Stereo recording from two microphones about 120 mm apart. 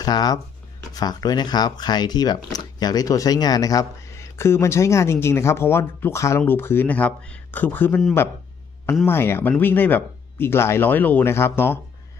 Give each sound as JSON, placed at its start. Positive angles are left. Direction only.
{"t": 0.0, "sound": "speech", "side_deg": 35}
{"t": 9.0, "sound": "speech", "side_deg": 20}